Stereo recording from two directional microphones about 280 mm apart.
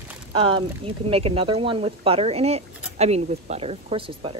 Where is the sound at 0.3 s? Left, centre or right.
Centre.